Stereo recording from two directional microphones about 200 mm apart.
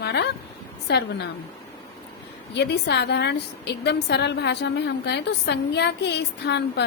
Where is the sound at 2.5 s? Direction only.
60° left (ahead or behind).